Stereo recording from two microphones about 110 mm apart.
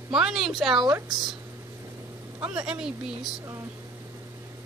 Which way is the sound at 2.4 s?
10° right (ahead or behind).